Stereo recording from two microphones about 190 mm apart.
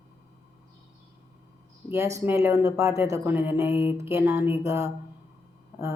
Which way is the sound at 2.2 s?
15° right (ahead or behind).